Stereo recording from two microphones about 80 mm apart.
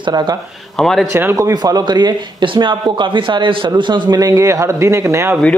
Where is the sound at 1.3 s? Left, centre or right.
Right.